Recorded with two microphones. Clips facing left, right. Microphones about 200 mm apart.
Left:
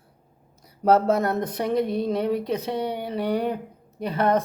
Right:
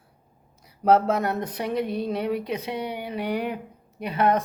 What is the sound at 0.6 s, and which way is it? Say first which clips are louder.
Speech: left 1 dB; 45° left (ahead or behind).